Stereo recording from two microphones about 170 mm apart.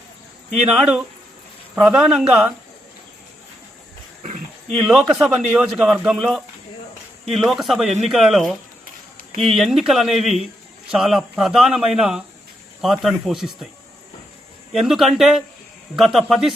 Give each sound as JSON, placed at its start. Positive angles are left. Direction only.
{"t": 0.7, "sound": "a man's voice", "side_deg": -5}
{"t": 4.2, "sound": "a sound", "side_deg": -45}
{"t": 4.9, "sound": "a man's voice", "side_deg": -5}
{"t": 14.7, "sound": "a man's voice", "side_deg": 0}